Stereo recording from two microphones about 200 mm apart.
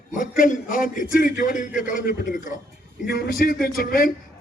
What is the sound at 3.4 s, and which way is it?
Speech, 45° left (ahead or behind).